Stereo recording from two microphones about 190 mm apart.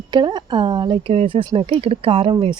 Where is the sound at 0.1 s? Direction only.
25° right (ahead or behind).